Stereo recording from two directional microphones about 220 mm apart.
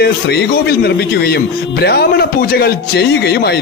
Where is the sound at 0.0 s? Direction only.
45° left (ahead or behind).